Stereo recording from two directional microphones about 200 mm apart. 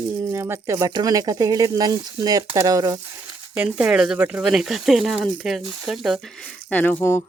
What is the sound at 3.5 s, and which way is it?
Speech, 5° right (ahead or behind).